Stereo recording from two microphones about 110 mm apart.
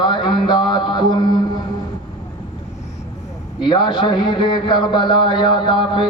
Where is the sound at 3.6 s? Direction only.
45° left (ahead or behind).